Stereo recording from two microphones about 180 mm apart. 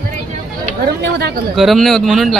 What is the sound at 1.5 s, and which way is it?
Speech, centre (ahead or behind).